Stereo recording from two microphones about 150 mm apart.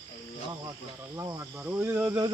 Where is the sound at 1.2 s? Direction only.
15° right (ahead or behind).